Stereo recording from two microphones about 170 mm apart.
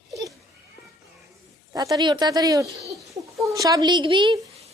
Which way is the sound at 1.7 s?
20° right (ahead or behind).